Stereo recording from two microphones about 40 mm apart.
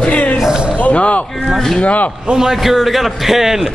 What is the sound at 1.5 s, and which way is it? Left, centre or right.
Speech, centre.